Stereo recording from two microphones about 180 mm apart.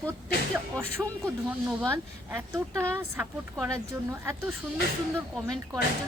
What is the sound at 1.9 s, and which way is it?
Speech, 15° right (ahead or behind).